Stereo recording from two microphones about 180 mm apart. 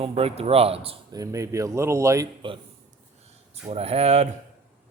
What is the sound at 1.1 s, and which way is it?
Speech, 20° right (ahead or behind).